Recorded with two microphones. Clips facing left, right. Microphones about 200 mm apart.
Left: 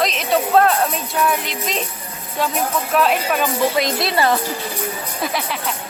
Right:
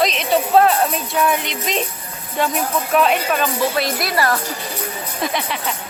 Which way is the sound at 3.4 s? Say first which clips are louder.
Left 1 dB; 15° left (ahead or behind).